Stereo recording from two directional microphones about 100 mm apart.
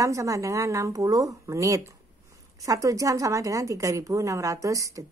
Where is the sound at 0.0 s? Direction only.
35° right (ahead or behind).